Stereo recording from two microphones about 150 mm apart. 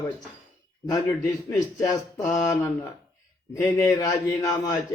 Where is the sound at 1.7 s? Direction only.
20° left (ahead or behind).